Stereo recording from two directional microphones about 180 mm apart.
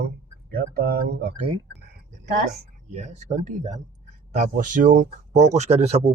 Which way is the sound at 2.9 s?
40° right (ahead or behind).